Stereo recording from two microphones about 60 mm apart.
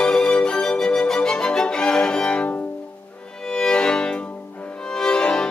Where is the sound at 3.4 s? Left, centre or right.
Centre.